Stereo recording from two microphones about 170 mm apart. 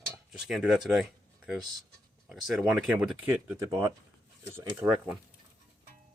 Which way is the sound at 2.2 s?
Centre (ahead or behind).